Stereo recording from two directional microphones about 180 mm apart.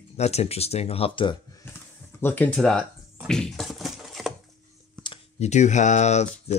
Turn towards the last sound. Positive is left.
turn(degrees=40)  # may be behind; listen again after turning